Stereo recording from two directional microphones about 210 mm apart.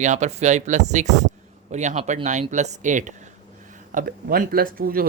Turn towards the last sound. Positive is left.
turn(degrees=-45)  # may be behind; listen again after turning